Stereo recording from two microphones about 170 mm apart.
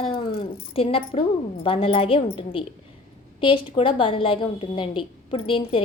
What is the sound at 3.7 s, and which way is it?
A woman's voice, 30° left (ahead or behind).